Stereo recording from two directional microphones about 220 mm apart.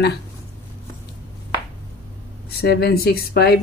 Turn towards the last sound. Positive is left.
turn(degrees=45)  # may be behind; listen again after turning